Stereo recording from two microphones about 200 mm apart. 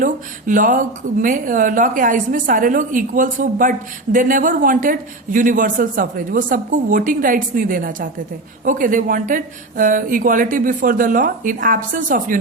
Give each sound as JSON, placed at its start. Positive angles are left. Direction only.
{"t": 0.0, "sound": "a woman's voice", "side_deg": -40}